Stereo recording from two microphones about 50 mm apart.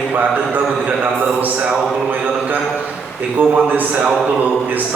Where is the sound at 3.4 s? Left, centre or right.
Right.